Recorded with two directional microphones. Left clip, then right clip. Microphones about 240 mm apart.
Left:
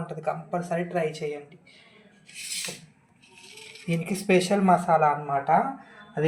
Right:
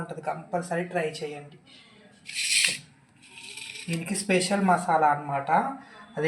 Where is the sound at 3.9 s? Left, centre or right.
Centre.